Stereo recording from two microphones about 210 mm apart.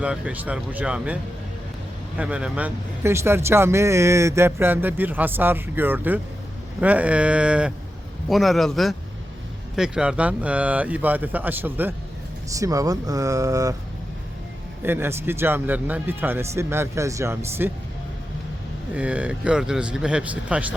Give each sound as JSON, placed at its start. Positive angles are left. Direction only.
{"t": 0.0, "sound": "speech", "side_deg": -5}
{"t": 14.8, "sound": "speech", "side_deg": -10}
{"t": 18.9, "sound": "speech", "side_deg": -5}